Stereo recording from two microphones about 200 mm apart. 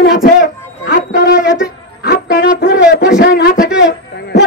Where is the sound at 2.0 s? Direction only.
60° left (ahead or behind).